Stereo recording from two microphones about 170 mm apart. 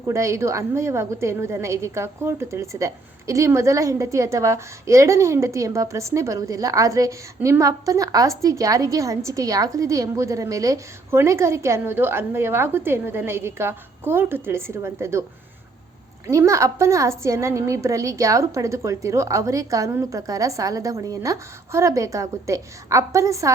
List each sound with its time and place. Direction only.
0.1 s a woman's voice: 15° right (ahead or behind)
16.2 s a woman's voice: 15° right (ahead or behind)